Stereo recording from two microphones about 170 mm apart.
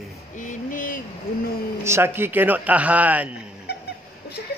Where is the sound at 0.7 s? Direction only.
50° left (ahead or behind).